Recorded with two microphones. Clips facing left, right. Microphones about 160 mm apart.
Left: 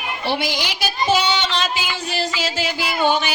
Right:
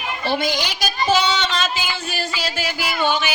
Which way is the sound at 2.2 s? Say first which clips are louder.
Left 4 dB; 25° left (ahead or behind).